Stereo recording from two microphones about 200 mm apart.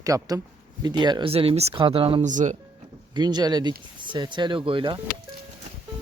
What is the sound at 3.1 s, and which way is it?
Speech, 20° right (ahead or behind).